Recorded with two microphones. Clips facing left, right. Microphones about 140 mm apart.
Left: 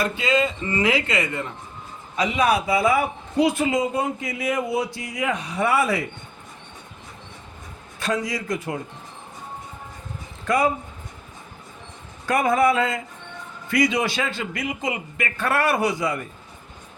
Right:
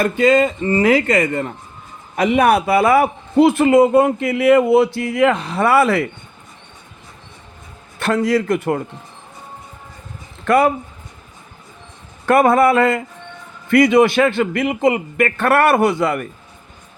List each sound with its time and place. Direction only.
0.0 s speech: 50° right (ahead or behind)
2.1 s a man's voice: 55° right (ahead or behind); by 6.1 s 75° right (ahead or behind)
7.9 s a man's voice: 65° right (ahead or behind)
10.4 s speech: 70° right (ahead or behind)
12.2 s a man's voice: 60° right (ahead or behind)